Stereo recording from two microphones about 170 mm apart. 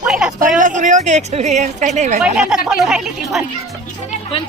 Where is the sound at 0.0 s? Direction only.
Centre (ahead or behind).